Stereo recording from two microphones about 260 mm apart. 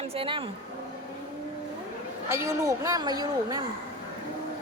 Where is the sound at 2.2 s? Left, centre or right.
Centre.